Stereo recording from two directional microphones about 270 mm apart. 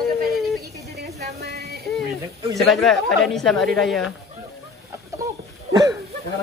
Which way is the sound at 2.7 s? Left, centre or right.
Centre.